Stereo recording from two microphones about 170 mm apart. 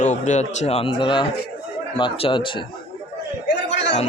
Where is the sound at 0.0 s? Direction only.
45° left (ahead or behind); by 2.6 s 30° left (ahead or behind).